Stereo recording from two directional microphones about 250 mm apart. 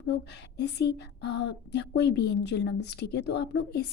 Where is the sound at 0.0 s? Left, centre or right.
Left.